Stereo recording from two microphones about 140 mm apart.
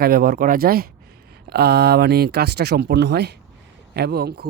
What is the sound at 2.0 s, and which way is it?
Speech, 90° right.